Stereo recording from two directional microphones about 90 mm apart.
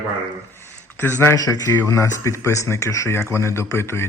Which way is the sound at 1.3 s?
40° left (ahead or behind).